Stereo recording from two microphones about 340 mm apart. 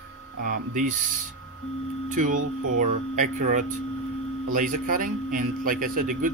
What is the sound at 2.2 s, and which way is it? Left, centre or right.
A man's voice, right.